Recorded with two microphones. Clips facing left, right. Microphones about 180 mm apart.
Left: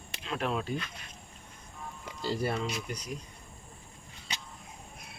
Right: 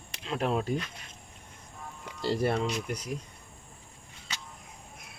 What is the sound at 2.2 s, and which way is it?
Speech, 70° right (ahead or behind).